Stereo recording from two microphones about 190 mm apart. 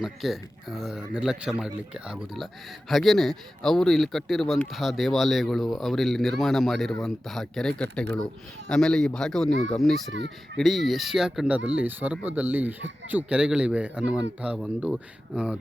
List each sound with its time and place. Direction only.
0.0 s speech: centre (ahead or behind)
10.1 s speech: 75° right (ahead or behind)
10.6 s speech: centre (ahead or behind)